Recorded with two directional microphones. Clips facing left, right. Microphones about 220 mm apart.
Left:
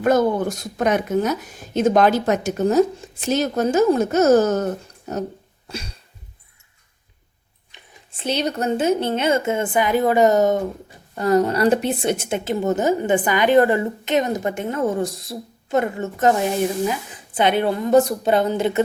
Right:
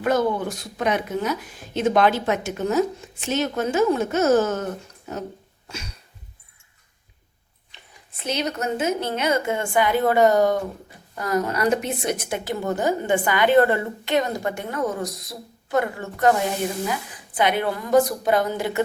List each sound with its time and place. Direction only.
0.0 s speech: 45° left (ahead or behind)
5.6 s a sound: 35° left (ahead or behind)
8.1 s a woman's voice: 30° left (ahead or behind)